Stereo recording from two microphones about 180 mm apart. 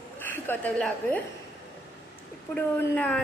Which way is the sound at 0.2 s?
10° left (ahead or behind).